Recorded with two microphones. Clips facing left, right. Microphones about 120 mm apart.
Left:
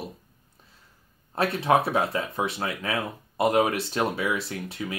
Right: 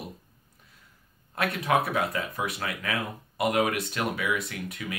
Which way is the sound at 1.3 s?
30° left (ahead or behind).